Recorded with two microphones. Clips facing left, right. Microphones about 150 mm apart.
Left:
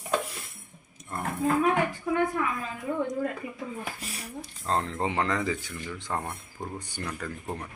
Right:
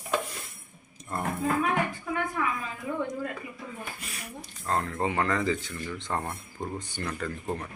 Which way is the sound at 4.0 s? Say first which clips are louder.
Left 2 dB; 35° left (ahead or behind).